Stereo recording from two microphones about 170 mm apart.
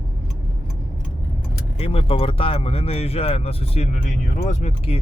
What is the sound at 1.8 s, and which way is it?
Speech, 35° left (ahead or behind).